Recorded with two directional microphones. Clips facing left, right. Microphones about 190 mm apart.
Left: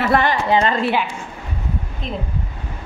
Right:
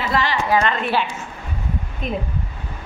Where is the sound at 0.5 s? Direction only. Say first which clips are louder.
Left 2 dB; 30° left (ahead or behind).